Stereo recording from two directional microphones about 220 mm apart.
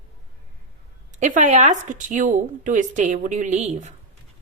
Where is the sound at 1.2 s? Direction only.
35° right (ahead or behind).